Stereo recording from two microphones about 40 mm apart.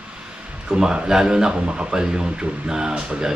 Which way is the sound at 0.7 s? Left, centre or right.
Right.